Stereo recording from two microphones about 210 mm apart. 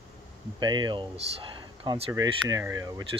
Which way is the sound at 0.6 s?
20° right (ahead or behind).